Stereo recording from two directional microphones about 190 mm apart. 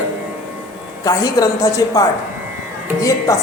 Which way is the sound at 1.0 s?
20° left (ahead or behind).